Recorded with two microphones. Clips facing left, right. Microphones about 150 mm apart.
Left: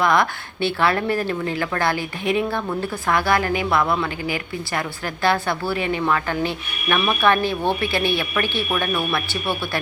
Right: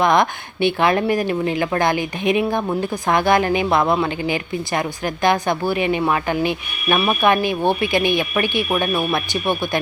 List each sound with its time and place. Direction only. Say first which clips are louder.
0.0 s speech: right 3 dB; 20° right (ahead or behind)